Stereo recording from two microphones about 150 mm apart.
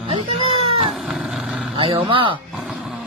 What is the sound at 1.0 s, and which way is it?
Dog, centre (ahead or behind).